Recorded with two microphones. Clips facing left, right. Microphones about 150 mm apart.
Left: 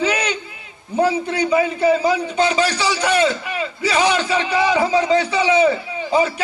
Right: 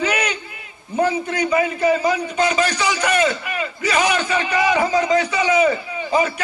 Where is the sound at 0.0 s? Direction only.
30° left (ahead or behind).